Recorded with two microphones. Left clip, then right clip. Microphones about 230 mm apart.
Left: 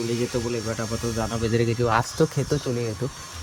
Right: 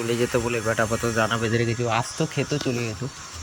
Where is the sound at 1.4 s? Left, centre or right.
Centre.